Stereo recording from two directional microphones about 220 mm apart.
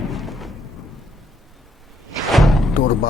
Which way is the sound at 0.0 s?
Centre (ahead or behind).